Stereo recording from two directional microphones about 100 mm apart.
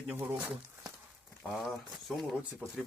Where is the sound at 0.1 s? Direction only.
25° right (ahead or behind).